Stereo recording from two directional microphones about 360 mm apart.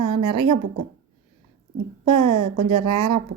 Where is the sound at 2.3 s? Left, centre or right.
Right.